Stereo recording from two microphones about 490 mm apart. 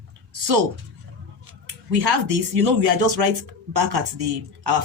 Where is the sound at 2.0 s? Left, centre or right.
Right.